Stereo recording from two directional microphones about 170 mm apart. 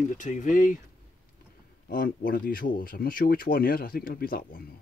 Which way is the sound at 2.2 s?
55° left (ahead or behind).